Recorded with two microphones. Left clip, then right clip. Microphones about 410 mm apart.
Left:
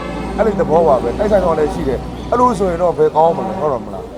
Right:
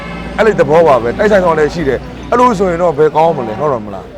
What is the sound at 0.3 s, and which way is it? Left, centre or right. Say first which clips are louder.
Speech: right 5 dB; right.